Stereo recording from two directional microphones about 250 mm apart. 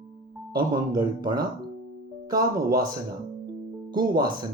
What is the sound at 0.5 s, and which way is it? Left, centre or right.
Speech, centre.